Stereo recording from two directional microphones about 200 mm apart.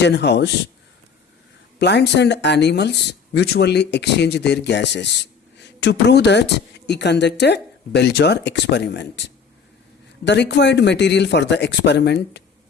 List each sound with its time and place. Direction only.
0.0 s speech: 60° left (ahead or behind)
1.8 s speech: 60° left (ahead or behind)